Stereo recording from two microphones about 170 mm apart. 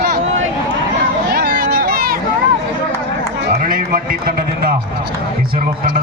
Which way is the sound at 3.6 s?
55° right (ahead or behind).